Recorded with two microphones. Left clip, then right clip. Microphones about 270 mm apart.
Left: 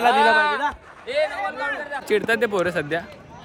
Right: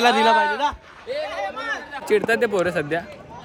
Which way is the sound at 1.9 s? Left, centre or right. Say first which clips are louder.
Right 2 dB; centre.